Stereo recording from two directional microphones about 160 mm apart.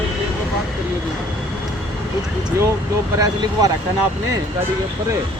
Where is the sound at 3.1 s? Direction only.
20° right (ahead or behind).